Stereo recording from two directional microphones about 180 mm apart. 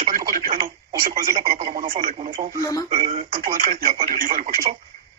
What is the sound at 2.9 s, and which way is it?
Speech, 30° right (ahead or behind).